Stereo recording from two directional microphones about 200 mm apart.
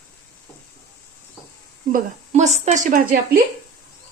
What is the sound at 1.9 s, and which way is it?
A woman's voice, 35° right (ahead or behind).